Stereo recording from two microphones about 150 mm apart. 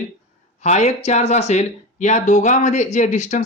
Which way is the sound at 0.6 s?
50° left (ahead or behind).